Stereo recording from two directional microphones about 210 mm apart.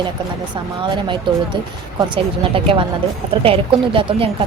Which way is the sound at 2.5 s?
25° right (ahead or behind).